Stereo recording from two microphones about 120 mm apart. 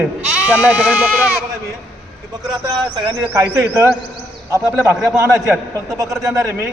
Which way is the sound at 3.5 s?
20° right (ahead or behind).